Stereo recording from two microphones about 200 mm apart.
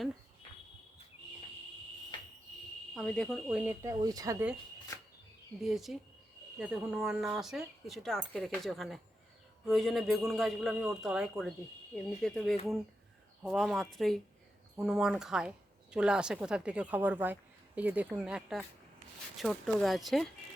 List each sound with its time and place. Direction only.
2.9 s speech: 5° left (ahead or behind)
3.4 s speech: 10° right (ahead or behind)
5.6 s speech: centre (ahead or behind)